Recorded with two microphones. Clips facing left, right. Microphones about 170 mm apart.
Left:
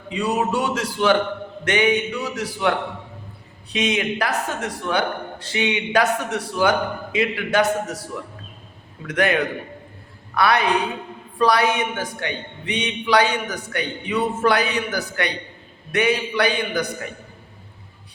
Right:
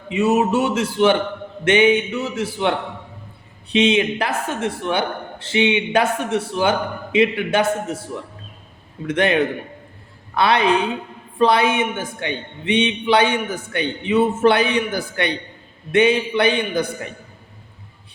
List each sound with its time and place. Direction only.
0.1 s a man's voice: 20° right (ahead or behind)
9.0 s a man's voice: 25° right (ahead or behind)